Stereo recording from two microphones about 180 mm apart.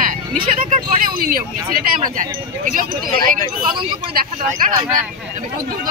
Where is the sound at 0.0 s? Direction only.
50° right (ahead or behind).